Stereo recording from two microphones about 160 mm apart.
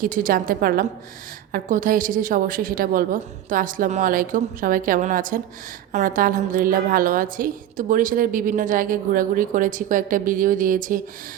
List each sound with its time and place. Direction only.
0.0 s a woman's voice: 55° right (ahead or behind)
1.5 s a woman's voice: 55° right (ahead or behind)